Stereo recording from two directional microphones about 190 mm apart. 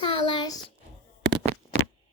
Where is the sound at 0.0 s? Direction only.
25° left (ahead or behind).